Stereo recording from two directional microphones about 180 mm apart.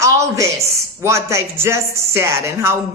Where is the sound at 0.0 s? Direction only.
15° right (ahead or behind).